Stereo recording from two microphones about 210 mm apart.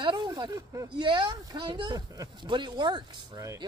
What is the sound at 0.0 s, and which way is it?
Speech, 20° right (ahead or behind).